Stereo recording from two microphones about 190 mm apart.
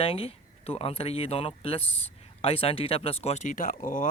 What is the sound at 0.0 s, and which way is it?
Speech, 30° left (ahead or behind).